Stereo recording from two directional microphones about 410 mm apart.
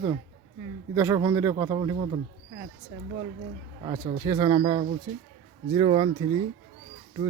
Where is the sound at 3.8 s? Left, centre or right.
Centre.